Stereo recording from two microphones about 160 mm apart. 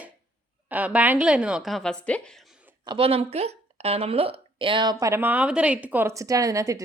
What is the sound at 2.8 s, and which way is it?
Speech, 30° right (ahead or behind).